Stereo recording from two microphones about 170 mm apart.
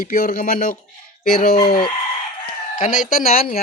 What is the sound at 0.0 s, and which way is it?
Speech, 55° left (ahead or behind).